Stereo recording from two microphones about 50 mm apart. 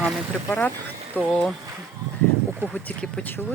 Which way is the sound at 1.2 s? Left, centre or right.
Left.